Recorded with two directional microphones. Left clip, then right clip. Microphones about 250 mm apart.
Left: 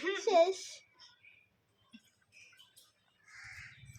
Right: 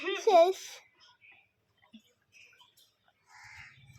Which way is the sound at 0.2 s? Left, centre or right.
Right.